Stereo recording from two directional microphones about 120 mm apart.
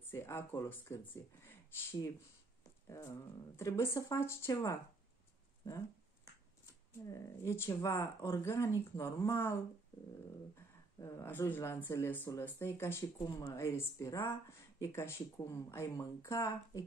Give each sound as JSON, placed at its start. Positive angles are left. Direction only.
{"t": 0.0, "sound": "speech", "side_deg": 20}
{"t": 3.5, "sound": "speech", "side_deg": 25}
{"t": 6.6, "sound": "speech", "side_deg": 25}
{"t": 11.2, "sound": "speech", "side_deg": 15}